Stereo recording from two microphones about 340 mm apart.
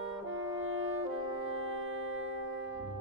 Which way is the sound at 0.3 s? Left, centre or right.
Right.